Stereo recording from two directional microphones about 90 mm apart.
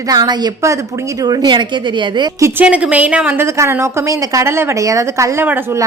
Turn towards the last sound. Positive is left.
turn(degrees=-35)  # may be behind; listen again after turning